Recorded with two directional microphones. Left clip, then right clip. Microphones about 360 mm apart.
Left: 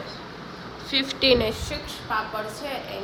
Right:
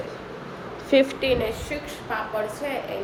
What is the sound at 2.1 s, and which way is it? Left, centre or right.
Speech, centre.